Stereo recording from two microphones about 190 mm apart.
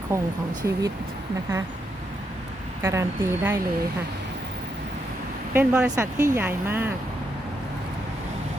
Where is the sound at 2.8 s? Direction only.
15° right (ahead or behind).